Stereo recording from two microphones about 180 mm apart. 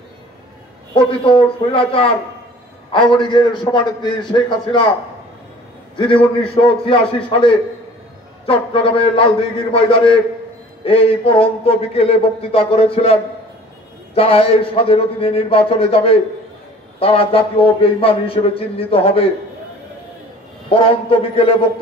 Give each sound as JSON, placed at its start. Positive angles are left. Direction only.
{"t": 0.9, "sound": "a man's voice", "side_deg": 30}
{"t": 5.9, "sound": "a man's voice", "side_deg": 30}
{"t": 20.7, "sound": "a man's voice", "side_deg": 30}